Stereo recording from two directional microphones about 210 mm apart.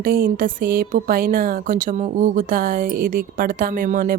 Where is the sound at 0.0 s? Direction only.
40° right (ahead or behind).